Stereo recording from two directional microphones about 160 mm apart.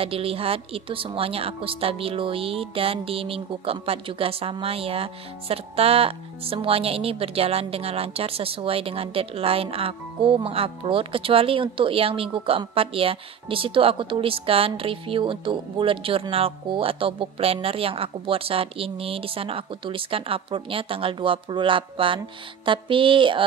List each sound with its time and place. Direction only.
0.0 s a woman's voice: 35° right (ahead or behind)